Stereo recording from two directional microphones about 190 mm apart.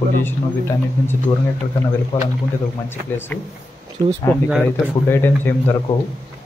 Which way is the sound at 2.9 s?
10° left (ahead or behind).